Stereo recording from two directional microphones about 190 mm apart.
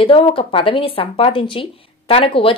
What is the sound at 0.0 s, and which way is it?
Speech, 30° left (ahead or behind).